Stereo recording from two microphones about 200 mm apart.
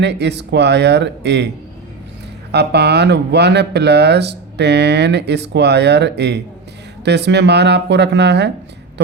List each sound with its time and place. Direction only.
0.0 s speech: 60° right (ahead or behind)
2.5 s speech: 55° right (ahead or behind)